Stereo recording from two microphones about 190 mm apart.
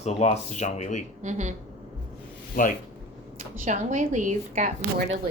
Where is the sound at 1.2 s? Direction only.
40° right (ahead or behind).